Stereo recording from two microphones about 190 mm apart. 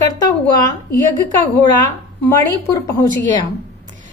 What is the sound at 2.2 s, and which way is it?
Speech, 15° left (ahead or behind).